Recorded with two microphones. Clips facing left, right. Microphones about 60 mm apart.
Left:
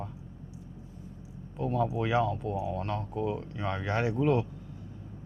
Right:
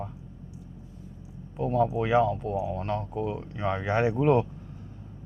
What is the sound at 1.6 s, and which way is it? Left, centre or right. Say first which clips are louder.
Speech: right 4 dB; centre.